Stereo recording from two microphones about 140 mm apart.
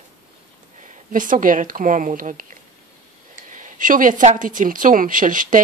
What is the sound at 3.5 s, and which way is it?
Speech, 65° right (ahead or behind).